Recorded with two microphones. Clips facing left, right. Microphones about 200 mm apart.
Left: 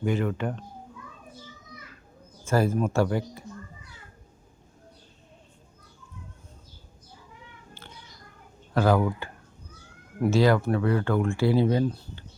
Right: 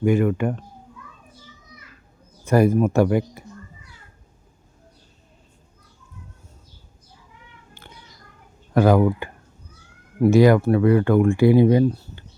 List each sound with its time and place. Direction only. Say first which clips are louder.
0.0 s speech: right 8 dB; 10° right (ahead or behind)
2.5 s speech: right 7 dB; 15° right (ahead or behind)
7.7 s a sound: right 2 dB; 15° right (ahead or behind)
8.7 s speech: right 6 dB; 15° right (ahead or behind)
10.2 s speech: right 7 dB; 15° right (ahead or behind)